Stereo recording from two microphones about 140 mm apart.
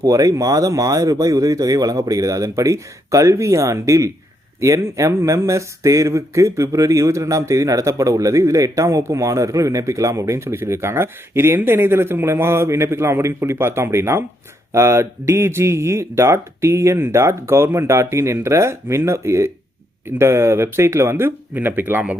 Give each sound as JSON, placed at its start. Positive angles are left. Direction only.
{"t": 0.0, "sound": "speech", "side_deg": -25}